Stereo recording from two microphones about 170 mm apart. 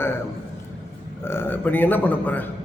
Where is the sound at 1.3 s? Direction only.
15° left (ahead or behind).